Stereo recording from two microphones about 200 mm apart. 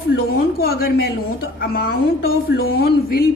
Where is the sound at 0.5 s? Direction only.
50° left (ahead or behind).